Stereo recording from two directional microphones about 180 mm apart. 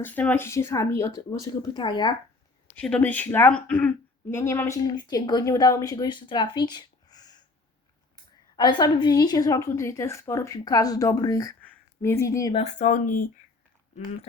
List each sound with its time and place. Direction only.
0.0 s speech: 10° left (ahead or behind); by 2.1 s 25° left (ahead or behind)
2.7 s a woman's voice: 5° left (ahead or behind)
12.5 s speech: 40° left (ahead or behind)